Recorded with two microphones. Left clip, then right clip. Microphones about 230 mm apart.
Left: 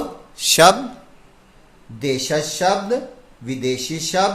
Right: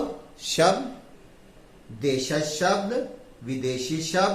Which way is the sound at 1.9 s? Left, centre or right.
Left.